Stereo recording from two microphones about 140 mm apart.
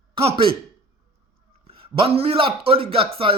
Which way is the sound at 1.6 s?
40° right (ahead or behind).